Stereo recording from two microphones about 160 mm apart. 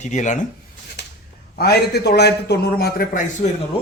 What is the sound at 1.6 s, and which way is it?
A man's voice, 90° left.